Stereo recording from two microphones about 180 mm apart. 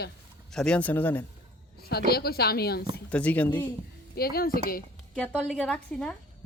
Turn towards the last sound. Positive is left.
turn(degrees=5)  # may be behind; listen again after turning